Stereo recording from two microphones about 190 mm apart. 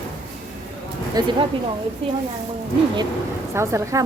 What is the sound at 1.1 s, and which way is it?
Speech, 25° right (ahead or behind).